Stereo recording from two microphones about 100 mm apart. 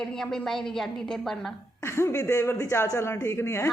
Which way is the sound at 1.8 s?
25° left (ahead or behind).